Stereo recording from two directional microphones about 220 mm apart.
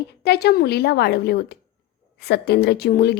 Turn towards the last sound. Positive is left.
turn(degrees=50)  # may be behind; listen again after turning